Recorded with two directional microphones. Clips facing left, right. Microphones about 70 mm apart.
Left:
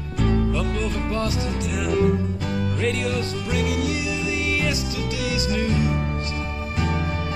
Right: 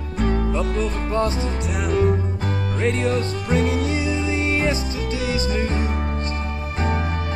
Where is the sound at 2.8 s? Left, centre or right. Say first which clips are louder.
Right 5 dB; right.